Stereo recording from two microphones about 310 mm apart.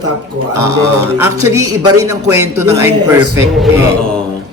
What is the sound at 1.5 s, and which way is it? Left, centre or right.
Speech, right.